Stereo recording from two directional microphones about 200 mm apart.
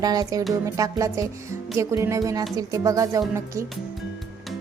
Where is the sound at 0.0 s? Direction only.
20° right (ahead or behind).